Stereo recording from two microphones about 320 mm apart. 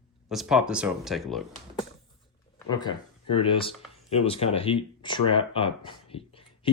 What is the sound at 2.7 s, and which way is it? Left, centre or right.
Speech, centre.